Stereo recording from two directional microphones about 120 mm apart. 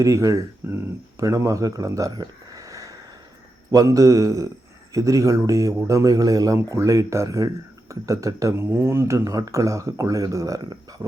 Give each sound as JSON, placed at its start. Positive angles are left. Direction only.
{"t": 0.0, "sound": "a man's voice", "side_deg": -25}